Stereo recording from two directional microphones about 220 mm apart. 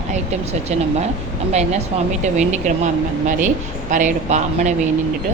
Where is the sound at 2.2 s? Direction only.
30° right (ahead or behind).